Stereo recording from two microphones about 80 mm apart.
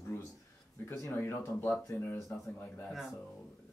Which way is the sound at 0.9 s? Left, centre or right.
Left.